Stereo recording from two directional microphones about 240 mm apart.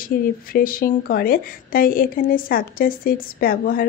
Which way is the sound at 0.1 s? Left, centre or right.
Left.